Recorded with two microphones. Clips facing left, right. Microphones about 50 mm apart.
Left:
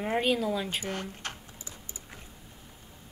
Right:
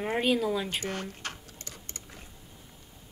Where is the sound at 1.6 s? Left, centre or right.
Right.